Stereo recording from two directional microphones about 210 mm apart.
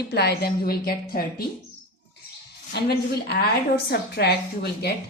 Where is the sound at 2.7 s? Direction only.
50° left (ahead or behind).